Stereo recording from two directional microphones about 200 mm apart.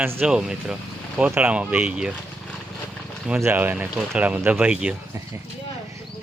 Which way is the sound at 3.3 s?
5° right (ahead or behind).